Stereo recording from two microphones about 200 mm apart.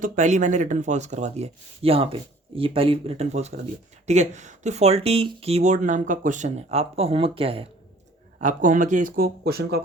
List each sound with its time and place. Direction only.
0.0 s speech: 40° right (ahead or behind)
8.4 s speech: 40° right (ahead or behind)